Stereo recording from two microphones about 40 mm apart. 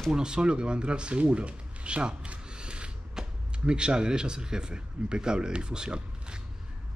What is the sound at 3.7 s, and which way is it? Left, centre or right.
Speech, right.